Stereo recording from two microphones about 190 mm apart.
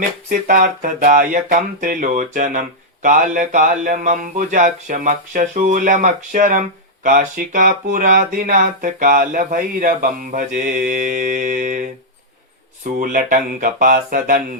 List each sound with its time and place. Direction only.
0.3 s music: 45° right (ahead or behind)